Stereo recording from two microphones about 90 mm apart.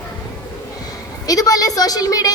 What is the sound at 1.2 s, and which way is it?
A woman's voice, 45° left (ahead or behind).